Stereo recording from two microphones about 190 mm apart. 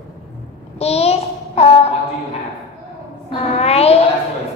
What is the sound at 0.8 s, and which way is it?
Child singing, 35° left (ahead or behind).